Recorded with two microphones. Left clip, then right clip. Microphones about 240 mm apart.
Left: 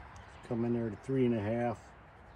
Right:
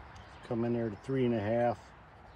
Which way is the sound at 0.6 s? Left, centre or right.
Centre.